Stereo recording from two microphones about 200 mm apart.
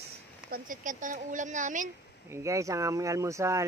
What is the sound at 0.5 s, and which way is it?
Speech, 40° right (ahead or behind).